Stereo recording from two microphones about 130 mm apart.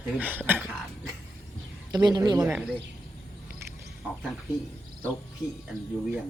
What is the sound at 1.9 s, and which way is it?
Speech, 30° right (ahead or behind).